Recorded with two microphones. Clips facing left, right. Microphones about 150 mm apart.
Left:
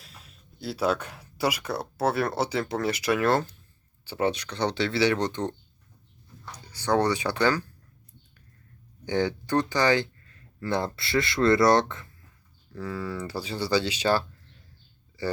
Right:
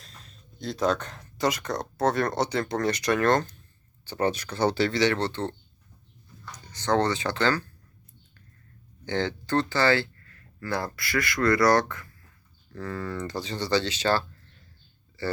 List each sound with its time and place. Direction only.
0.0 s speech: 5° left (ahead or behind)
6.7 s speech: 10° left (ahead or behind)
9.0 s speech: 10° left (ahead or behind)
12.7 s speech: 10° left (ahead or behind)